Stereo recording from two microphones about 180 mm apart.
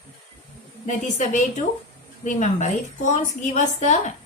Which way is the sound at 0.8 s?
45° left (ahead or behind).